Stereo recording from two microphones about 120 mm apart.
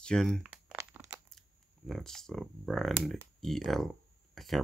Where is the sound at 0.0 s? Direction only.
5° left (ahead or behind).